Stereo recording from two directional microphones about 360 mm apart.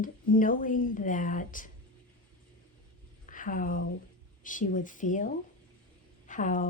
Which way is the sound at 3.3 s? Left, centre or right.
Left.